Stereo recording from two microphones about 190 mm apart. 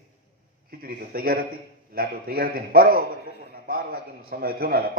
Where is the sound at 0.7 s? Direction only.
50° right (ahead or behind).